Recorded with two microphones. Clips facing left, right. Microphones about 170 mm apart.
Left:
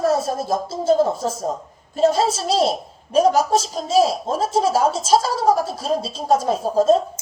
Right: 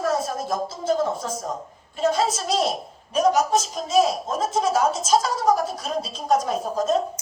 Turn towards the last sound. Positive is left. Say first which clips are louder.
# left 7 dB
turn(degrees=30)  # may be behind; listen again after turning